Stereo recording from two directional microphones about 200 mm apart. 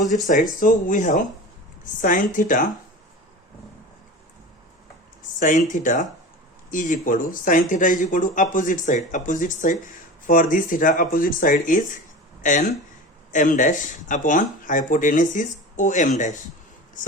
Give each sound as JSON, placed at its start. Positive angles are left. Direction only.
{"t": 0.3, "sound": "speech", "side_deg": 40}
{"t": 5.4, "sound": "speech", "side_deg": 40}